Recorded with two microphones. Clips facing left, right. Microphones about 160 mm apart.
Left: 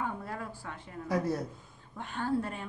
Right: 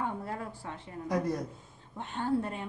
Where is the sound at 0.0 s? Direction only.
25° right (ahead or behind).